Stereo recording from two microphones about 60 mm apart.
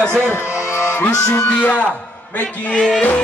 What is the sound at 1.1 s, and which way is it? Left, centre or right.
Music, left.